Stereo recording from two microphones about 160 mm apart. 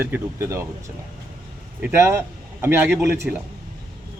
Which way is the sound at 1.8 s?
15° right (ahead or behind).